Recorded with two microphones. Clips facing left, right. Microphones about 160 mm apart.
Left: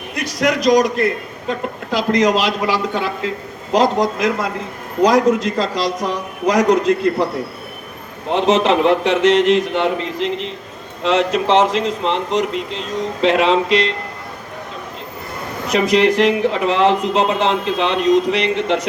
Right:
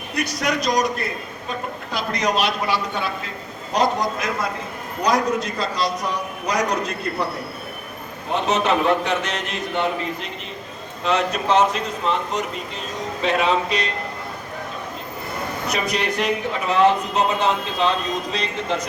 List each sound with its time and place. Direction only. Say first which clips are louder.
0.3 s speech: left 8 dB; 90° left
8.3 s speech: left 6 dB; 90° left
15.6 s speech: left 11 dB; 90° left; by 18.9 s 70° left (ahead or behind)